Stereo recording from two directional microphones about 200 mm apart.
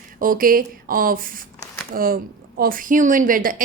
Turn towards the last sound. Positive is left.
turn(degrees=-45)  # may be behind; listen again after turning